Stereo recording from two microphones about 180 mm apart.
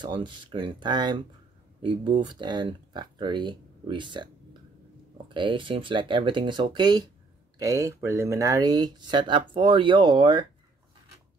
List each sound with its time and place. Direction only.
0.0 s speech: 25° right (ahead or behind)